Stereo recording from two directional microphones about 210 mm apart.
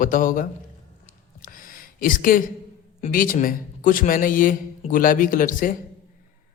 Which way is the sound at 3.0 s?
40° left (ahead or behind).